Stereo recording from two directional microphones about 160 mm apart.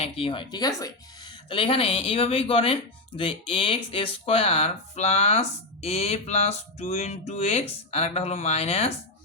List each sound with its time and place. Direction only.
0.0 s speech: 35° left (ahead or behind)